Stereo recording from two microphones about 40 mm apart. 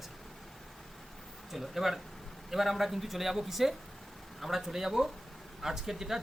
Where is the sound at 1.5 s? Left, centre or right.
Centre.